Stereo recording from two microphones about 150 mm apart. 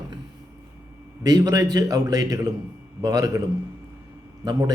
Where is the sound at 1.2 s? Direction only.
25° right (ahead or behind).